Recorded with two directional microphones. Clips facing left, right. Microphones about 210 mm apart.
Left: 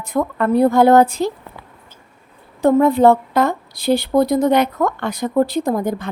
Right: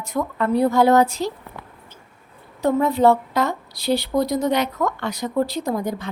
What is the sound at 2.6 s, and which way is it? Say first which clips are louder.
A woman's voice: left 5 dB; 50° left (ahead or behind).